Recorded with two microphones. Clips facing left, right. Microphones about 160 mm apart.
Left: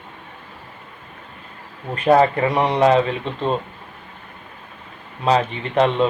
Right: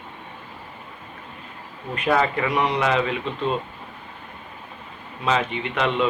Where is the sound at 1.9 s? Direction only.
35° left (ahead or behind).